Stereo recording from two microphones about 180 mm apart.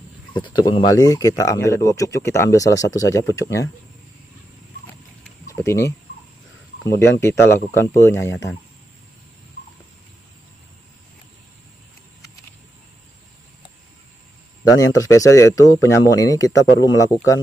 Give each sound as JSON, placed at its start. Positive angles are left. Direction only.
{"t": 0.3, "sound": "speech", "side_deg": 25}
{"t": 5.5, "sound": "speech", "side_deg": 15}
{"t": 14.6, "sound": "speech", "side_deg": 20}